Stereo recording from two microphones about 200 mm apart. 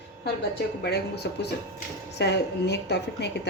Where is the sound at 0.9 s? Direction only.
55° left (ahead or behind).